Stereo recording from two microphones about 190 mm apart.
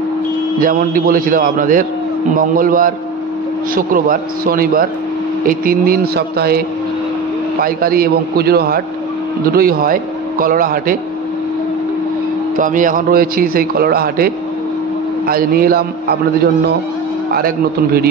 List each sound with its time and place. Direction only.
0.6 s a man's voice: 45° right (ahead or behind)
7.6 s a man's voice: 50° right (ahead or behind)
12.5 s a man's voice: 45° right (ahead or behind)